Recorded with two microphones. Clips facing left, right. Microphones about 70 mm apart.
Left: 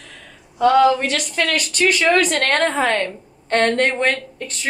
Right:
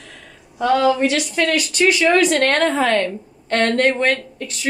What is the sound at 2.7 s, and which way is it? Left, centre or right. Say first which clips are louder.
Speech: right 2 dB; left.